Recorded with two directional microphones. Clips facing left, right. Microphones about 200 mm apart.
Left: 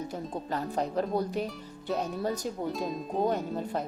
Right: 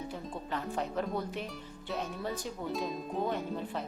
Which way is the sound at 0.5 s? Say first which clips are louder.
Left 4 dB; 35° left (ahead or behind).